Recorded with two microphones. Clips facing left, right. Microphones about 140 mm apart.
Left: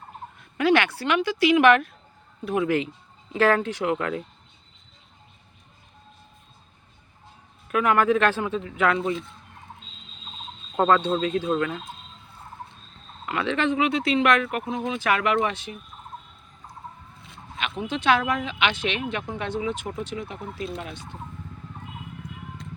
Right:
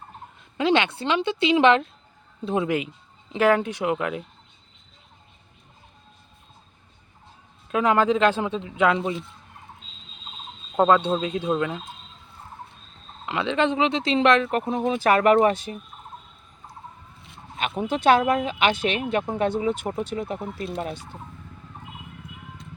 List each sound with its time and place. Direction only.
0.5 s speech: 20° right (ahead or behind)
7.7 s speech: 25° right (ahead or behind)
10.8 s speech: 15° right (ahead or behind)
13.2 s speech: 20° right (ahead or behind)
14.6 s speech: 35° right (ahead or behind)
17.6 s speech: 45° right (ahead or behind)